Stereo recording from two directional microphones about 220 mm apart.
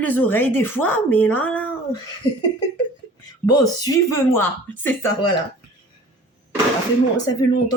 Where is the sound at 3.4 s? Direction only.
15° left (ahead or behind).